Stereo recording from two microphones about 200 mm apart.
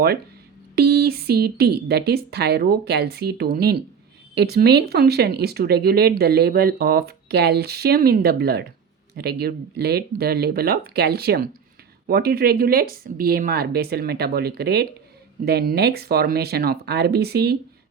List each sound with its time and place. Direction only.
0.8 s speech: 50° right (ahead or behind)